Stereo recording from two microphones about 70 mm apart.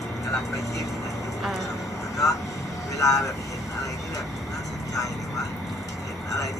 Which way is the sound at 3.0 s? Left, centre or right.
Left.